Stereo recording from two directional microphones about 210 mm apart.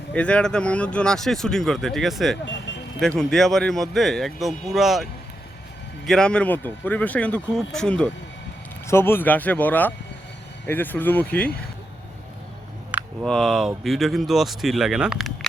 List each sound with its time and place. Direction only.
0.1 s speech: 5° left (ahead or behind)
2.7 s vehicle: 60° left (ahead or behind)
3.0 s speech: 5° left (ahead or behind)
6.1 s speech: 5° left (ahead or behind)
13.2 s speech: centre (ahead or behind)